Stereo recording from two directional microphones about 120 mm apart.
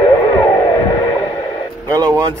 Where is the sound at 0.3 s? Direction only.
30° left (ahead or behind).